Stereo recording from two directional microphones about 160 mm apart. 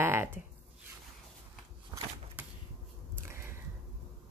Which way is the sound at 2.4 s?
10° right (ahead or behind).